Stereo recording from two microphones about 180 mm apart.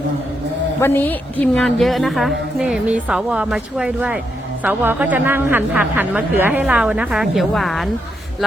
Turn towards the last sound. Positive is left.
turn(degrees=0)  # may be behind; listen again after turning